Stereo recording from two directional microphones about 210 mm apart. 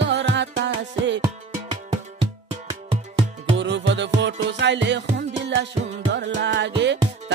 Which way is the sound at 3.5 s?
60° right (ahead or behind).